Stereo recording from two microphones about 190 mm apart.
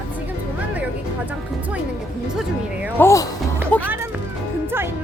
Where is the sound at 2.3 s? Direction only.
5° right (ahead or behind).